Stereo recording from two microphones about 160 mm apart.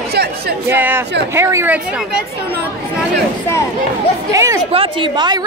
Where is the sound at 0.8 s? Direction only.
15° right (ahead or behind).